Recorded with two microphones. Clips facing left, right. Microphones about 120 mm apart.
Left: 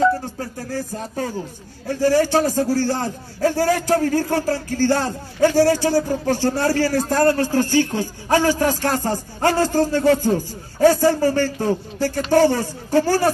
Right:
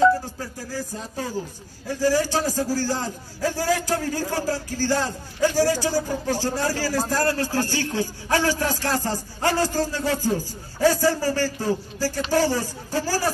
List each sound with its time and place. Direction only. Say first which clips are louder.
0.4 s a man's voice: left 4 dB; 60° left (ahead or behind)
7.9 s a sound: left 4 dB; 50° left (ahead or behind)
9.4 s a man's voice: left 5 dB; 50° left (ahead or behind)